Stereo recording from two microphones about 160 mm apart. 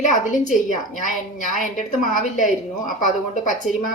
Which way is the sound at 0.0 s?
50° left (ahead or behind).